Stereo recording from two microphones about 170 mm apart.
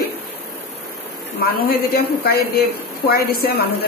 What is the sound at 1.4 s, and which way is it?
A woman's voice, 65° left (ahead or behind).